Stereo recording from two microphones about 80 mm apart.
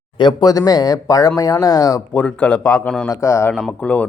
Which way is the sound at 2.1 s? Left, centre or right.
Centre.